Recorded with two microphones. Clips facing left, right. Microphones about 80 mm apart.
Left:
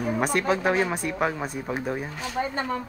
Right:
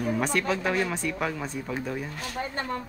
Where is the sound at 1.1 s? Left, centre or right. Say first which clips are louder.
Left 3 dB; left.